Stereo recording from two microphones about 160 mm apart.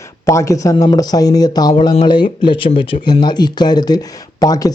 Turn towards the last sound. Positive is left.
turn(degrees=25)  # may be behind; listen again after turning